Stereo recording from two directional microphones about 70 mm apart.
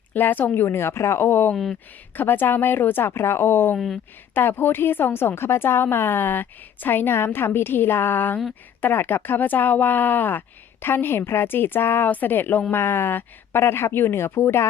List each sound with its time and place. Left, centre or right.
0.1 s a woman's voice: left
3.8 s speech: centre
4.4 s a woman's voice: left